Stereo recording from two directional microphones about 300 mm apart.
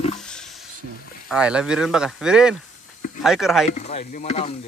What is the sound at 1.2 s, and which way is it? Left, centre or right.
Speech, centre.